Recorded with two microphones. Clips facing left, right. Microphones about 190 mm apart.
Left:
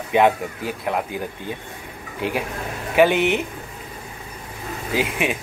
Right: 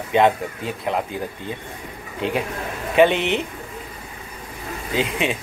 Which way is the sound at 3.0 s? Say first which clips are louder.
Even; 5° left (ahead or behind).